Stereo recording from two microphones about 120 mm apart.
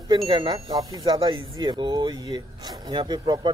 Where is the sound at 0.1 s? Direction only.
40° right (ahead or behind).